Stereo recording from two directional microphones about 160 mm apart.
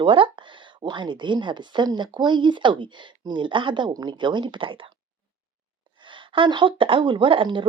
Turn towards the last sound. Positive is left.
turn(degrees=-30)  # may be behind; listen again after turning